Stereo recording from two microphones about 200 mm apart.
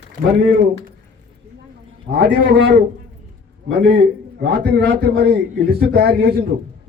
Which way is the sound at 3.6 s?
55° right (ahead or behind).